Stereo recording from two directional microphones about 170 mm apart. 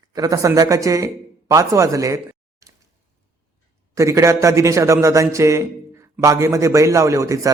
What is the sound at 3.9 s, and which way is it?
A man's voice, 15° right (ahead or behind).